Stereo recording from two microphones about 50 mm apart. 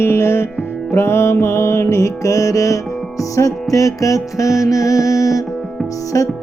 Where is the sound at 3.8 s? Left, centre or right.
Left.